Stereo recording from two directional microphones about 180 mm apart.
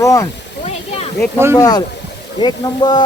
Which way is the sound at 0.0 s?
20° left (ahead or behind).